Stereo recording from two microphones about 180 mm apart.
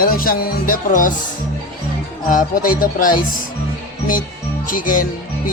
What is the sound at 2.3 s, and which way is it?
Speech, 50° left (ahead or behind).